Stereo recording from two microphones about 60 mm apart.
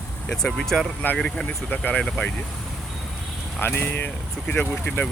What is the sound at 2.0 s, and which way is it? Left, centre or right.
Speech, centre.